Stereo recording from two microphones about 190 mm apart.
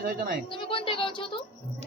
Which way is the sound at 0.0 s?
50° right (ahead or behind).